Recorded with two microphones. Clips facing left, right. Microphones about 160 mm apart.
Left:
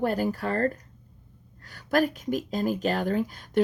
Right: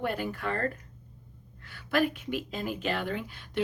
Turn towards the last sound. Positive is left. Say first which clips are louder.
# left 8 dB
turn(degrees=40)  # may be behind; listen again after turning